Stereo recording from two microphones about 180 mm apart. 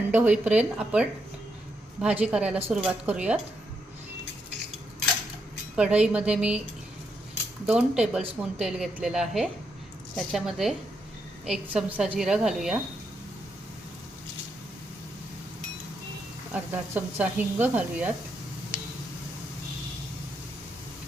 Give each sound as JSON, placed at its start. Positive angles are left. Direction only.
{"t": 0.1, "sound": "speech", "side_deg": -10}
{"t": 5.7, "sound": "speech", "side_deg": -5}
{"t": 7.7, "sound": "a woman's voice", "side_deg": -5}
{"t": 16.5, "sound": "speech", "side_deg": -10}